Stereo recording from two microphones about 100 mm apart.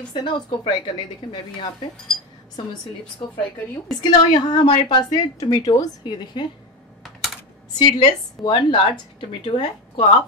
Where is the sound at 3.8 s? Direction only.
45° left (ahead or behind).